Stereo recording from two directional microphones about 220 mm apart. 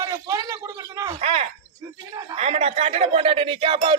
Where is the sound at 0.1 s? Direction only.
15° right (ahead or behind).